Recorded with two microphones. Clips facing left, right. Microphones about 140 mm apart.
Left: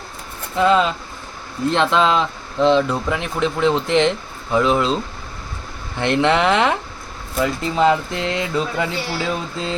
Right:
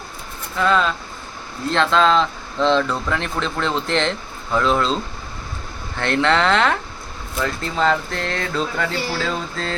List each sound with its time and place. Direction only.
0.5 s speech: 20° left (ahead or behind)
6.0 s speech: 15° left (ahead or behind)